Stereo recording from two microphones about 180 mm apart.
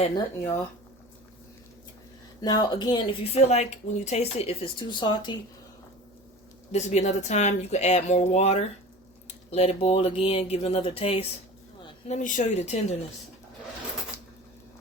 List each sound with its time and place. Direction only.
2.4 s speech: 20° left (ahead or behind)
3.3 s speech: 40° left (ahead or behind)
6.7 s speech: 40° left (ahead or behind)